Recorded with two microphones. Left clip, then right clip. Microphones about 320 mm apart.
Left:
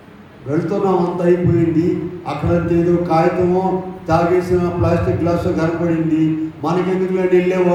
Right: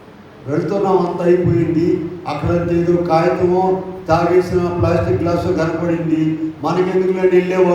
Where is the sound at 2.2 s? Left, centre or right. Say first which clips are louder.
Even; right.